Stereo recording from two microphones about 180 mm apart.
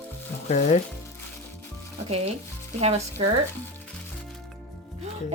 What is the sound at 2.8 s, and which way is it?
Speech, 35° right (ahead or behind).